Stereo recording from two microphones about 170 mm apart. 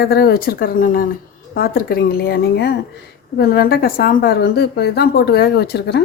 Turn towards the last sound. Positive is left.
turn(degrees=75)  # may be behind; listen again after turning